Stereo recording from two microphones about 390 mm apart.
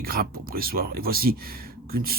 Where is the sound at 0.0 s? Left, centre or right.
Right.